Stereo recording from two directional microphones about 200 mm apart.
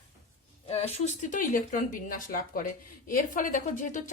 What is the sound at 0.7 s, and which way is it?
A woman's voice, 30° left (ahead or behind).